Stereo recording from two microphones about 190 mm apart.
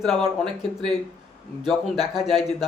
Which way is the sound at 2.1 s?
Centre (ahead or behind).